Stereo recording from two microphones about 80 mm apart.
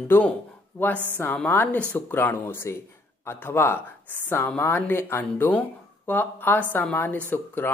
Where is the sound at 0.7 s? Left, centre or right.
Left.